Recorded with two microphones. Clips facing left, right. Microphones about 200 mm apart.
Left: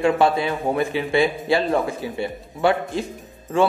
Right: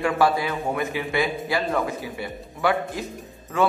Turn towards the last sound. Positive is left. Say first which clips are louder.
# left 3 dB
turn(degrees=30)  # may be behind; listen again after turning